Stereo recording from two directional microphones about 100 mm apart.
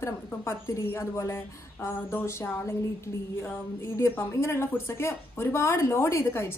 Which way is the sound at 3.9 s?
30° left (ahead or behind).